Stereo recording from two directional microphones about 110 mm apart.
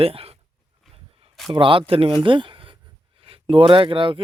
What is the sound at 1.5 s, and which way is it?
Speech, 50° right (ahead or behind).